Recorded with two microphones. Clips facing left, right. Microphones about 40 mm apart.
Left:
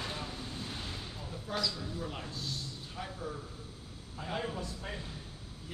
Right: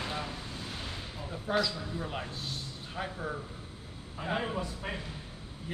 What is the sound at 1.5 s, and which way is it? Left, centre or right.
A man's voice, right.